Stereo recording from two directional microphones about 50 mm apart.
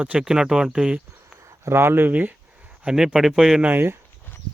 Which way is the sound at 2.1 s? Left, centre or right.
Right.